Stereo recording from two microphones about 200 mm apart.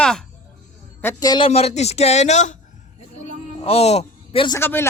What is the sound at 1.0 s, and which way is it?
Speech, 20° left (ahead or behind).